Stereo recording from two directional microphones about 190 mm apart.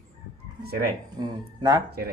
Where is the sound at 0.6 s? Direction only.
55° right (ahead or behind).